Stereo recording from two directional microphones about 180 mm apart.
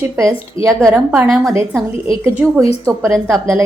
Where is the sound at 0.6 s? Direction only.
15° right (ahead or behind).